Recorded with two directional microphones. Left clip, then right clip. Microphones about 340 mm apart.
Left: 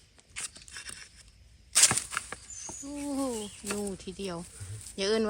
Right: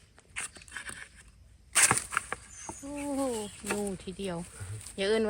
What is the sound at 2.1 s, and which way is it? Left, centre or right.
Rodents, centre.